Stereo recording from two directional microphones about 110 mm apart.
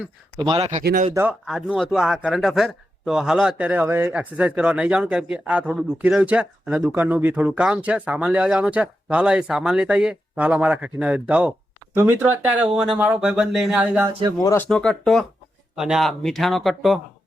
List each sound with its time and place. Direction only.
0.5 s speech: 70° right (ahead or behind)
1.1 s speech: 20° right (ahead or behind)
1.5 s a man's voice: 5° right (ahead or behind)
14.3 s speech: 30° left (ahead or behind)
14.7 s a man's voice: 5° left (ahead or behind)